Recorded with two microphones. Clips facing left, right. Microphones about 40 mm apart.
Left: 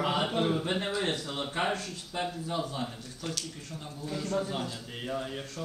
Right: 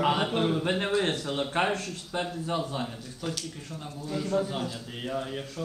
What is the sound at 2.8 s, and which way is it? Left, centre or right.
A man's voice, centre.